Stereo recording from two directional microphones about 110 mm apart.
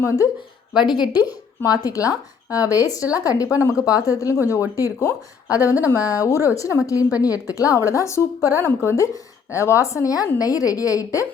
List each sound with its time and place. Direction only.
0.0 s speech: 25° left (ahead or behind)
0.9 s speech: 40° left (ahead or behind)
6.0 s speech: 10° right (ahead or behind)
6.4 s speech: 30° left (ahead or behind)